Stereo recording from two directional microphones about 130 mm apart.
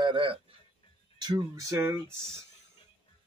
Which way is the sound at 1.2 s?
30° right (ahead or behind).